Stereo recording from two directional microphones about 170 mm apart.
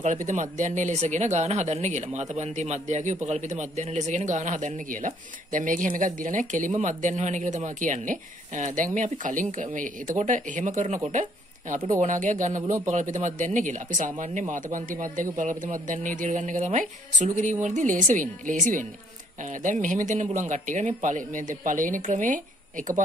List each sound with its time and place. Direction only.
0.0 s a man's voice: 45° right (ahead or behind)